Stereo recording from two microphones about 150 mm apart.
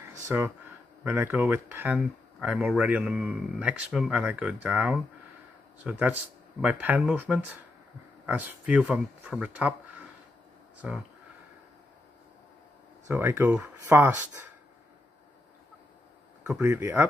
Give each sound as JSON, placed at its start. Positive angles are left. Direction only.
{"t": 0.0, "sound": "a sound", "side_deg": -15}
{"t": 1.0, "sound": "speech", "side_deg": -15}
{"t": 13.1, "sound": "speech", "side_deg": -15}
{"t": 16.6, "sound": "speech", "side_deg": -15}